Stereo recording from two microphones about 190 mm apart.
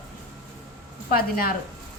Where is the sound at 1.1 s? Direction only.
50° left (ahead or behind).